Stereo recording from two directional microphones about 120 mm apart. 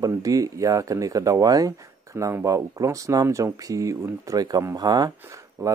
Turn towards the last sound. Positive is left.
turn(degrees=-25)  # may be behind; listen again after turning